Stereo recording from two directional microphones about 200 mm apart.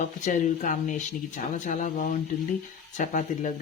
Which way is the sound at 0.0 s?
40° left (ahead or behind).